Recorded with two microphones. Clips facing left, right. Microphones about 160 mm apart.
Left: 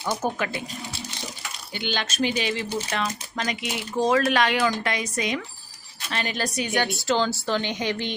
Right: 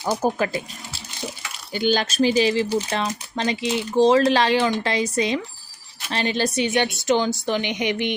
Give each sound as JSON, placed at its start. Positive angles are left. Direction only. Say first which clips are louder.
{"t": 0.0, "sound": "speech", "louder": "right 5 dB", "side_deg": -35}
{"t": 1.7, "sound": "speech", "louder": "right 8 dB", "side_deg": -40}